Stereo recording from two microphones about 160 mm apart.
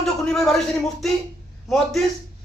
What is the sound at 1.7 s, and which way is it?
Speech, centre (ahead or behind).